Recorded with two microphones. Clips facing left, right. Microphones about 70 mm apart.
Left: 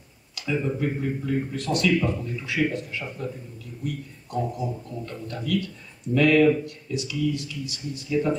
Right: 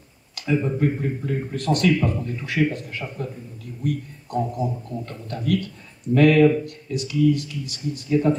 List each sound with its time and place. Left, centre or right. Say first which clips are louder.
0.5 s speech: right 4 dB; right